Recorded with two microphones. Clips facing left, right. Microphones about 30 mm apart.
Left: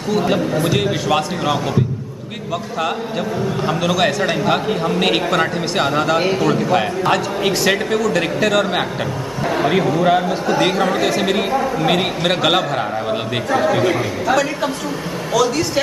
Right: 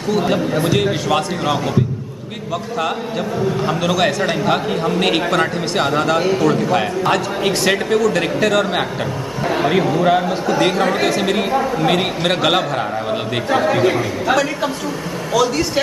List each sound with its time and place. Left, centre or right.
0.1 s a man's voice: centre
3.6 s a man's voice: centre